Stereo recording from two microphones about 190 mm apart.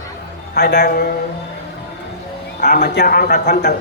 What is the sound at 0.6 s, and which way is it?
Speech, 55° left (ahead or behind).